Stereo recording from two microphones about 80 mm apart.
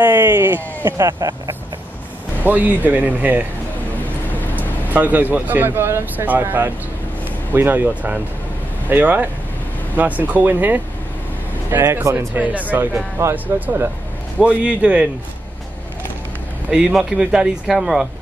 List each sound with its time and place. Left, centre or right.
0.0 s speech: right
0.9 s speech: right
2.4 s speech: right
4.6 s speech: right
11.7 s speech: right
12.4 s speech: centre
13.2 s speech: right
14.4 s speech: centre
16.9 s speech: centre